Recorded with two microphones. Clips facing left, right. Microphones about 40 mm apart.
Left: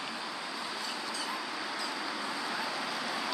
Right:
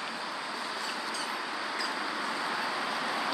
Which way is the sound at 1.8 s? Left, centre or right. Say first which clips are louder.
Right 3 dB; centre.